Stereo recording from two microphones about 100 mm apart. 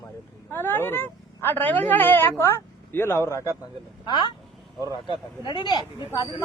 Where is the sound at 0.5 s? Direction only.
20° left (ahead or behind).